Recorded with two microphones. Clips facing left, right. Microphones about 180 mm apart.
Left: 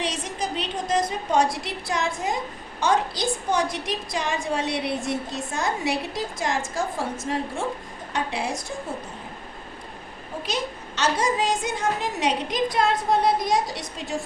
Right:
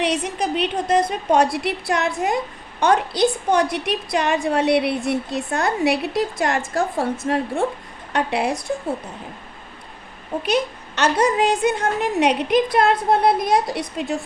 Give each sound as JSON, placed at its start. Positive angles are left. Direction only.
{"t": 0.0, "sound": "a woman's voice", "side_deg": -60}
{"t": 10.4, "sound": "a woman's voice", "side_deg": -60}